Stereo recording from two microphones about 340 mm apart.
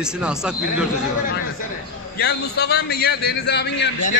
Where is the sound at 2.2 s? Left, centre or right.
Left.